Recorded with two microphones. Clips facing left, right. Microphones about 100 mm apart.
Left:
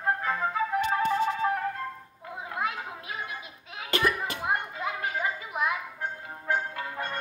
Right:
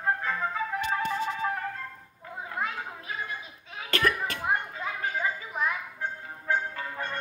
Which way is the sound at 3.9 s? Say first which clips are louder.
Even; 20° left (ahead or behind).